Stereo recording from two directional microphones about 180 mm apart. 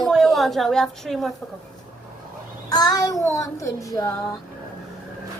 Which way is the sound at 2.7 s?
20° left (ahead or behind).